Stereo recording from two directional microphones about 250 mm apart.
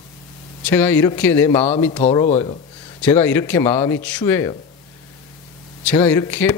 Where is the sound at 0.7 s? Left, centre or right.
Centre.